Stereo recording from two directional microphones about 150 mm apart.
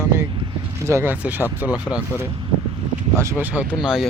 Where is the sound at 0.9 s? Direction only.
15° right (ahead or behind).